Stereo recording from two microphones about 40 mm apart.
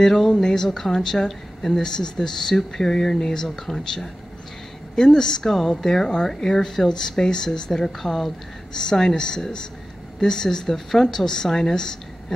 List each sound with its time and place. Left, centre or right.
0.0 s speech: centre